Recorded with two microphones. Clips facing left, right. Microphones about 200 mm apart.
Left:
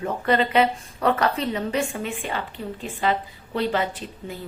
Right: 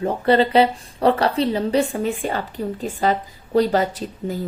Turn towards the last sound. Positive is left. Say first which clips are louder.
# right 8 dB
turn(degrees=-40)  # may be behind; listen again after turning